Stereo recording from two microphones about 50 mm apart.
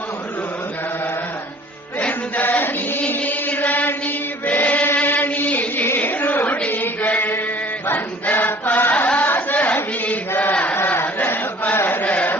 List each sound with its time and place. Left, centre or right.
2.0 s music: left
2.4 s chant: left
4.9 s music: left
6.0 s a sound: left
6.7 s chant: left
7.9 s chant: left